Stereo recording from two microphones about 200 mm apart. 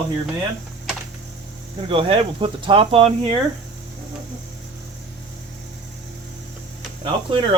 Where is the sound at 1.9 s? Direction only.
25° right (ahead or behind).